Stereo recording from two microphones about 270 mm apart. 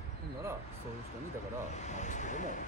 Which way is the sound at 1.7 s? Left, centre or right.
Left.